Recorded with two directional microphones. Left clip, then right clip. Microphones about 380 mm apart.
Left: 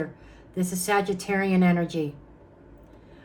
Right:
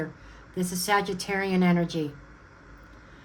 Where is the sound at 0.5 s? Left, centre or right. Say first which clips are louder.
Even; right.